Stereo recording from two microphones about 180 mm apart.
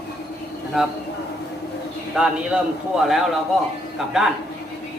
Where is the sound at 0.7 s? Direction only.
Centre (ahead or behind).